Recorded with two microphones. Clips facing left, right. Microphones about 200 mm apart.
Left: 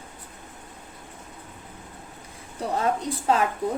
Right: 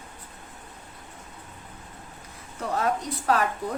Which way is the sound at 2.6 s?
25° left (ahead or behind).